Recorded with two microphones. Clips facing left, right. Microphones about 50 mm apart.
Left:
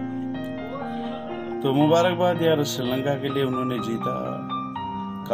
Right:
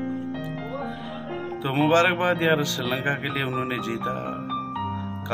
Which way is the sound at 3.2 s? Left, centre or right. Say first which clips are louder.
Left 3 dB; right.